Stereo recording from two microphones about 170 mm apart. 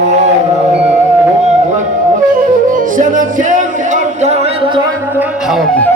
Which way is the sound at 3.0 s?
50° right (ahead or behind).